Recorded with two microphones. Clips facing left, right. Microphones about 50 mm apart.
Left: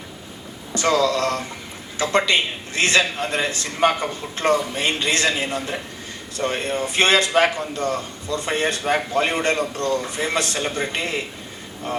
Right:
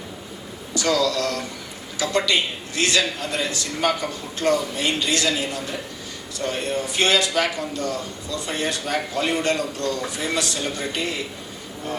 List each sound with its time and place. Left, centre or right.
0.7 s a man's voice: left